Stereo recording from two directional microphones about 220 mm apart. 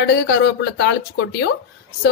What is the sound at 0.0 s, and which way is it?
A woman's voice, 50° left (ahead or behind).